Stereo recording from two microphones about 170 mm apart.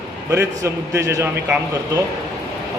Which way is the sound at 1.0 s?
15° right (ahead or behind).